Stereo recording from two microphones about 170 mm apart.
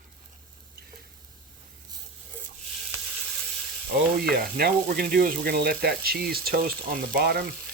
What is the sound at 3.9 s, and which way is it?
Speech, 80° right.